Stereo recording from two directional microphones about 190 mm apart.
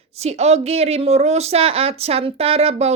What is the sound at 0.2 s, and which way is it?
Speech, 35° right (ahead or behind).